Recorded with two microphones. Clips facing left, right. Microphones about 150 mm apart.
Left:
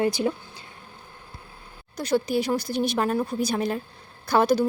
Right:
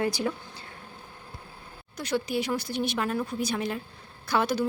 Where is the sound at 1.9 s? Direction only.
40° left (ahead or behind).